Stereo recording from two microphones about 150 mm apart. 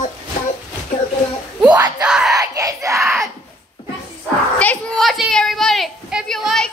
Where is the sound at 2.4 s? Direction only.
20° right (ahead or behind).